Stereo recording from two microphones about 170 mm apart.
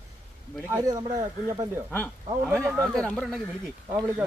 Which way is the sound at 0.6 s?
20° right (ahead or behind).